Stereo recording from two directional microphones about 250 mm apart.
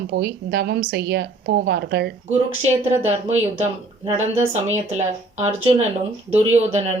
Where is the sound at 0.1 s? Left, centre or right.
Right.